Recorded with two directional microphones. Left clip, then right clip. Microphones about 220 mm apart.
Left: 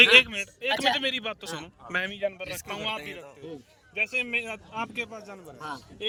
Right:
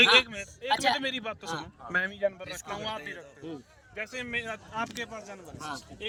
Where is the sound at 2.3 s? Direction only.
60° left (ahead or behind).